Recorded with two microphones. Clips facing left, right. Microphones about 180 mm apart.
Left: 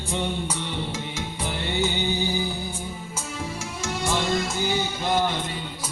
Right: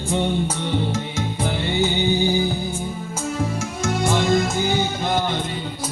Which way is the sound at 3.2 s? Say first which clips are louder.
Right 9 dB; 45° right (ahead or behind).